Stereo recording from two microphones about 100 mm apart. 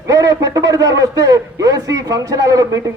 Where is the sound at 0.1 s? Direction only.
35° right (ahead or behind).